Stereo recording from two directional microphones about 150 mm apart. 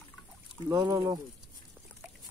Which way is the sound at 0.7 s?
25° right (ahead or behind).